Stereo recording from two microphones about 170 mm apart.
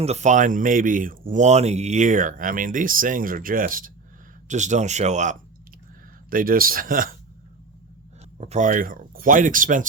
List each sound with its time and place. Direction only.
0.0 s speech: 40° right (ahead or behind)
6.3 s speech: 55° right (ahead or behind)
8.4 s speech: 45° right (ahead or behind)